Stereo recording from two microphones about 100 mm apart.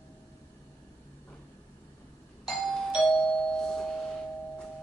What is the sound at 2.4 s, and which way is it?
Doorbell, 5° left (ahead or behind).